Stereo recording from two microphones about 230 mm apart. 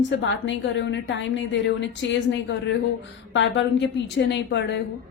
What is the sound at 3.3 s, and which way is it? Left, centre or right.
Speech, left.